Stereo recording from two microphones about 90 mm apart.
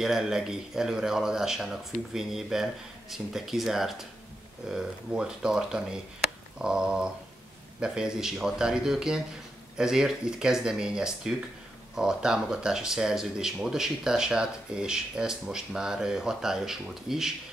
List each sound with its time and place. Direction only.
0.0 s speech: 5° right (ahead or behind)